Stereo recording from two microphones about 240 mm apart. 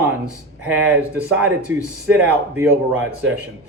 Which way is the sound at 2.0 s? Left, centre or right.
Centre.